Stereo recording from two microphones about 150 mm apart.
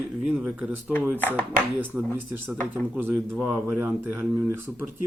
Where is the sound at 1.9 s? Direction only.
5° right (ahead or behind).